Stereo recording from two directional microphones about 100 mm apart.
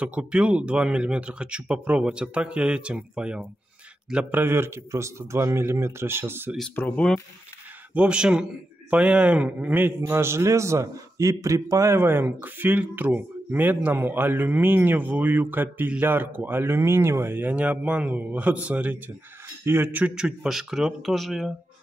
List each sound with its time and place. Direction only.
0.0 s a man's voice: 10° right (ahead or behind)
6.8 s speech: 20° left (ahead or behind)
7.9 s a man's voice: 10° right (ahead or behind)
20.2 s speech: 5° right (ahead or behind)